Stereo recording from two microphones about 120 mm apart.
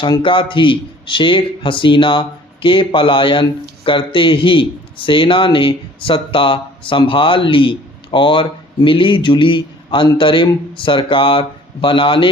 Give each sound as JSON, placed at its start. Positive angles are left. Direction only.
{"t": 0.0, "sound": "a man's voice", "side_deg": 45}